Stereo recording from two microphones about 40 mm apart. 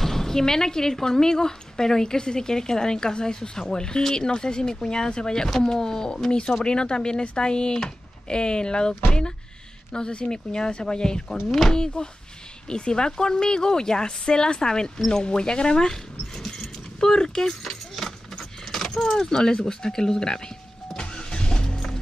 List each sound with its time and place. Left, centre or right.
0.0 s speech: centre
9.9 s speech: left
11.4 s speech: centre
11.7 s speech: centre
15.0 s a sound: centre